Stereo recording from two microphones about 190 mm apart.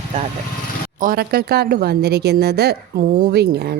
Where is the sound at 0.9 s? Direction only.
50° right (ahead or behind).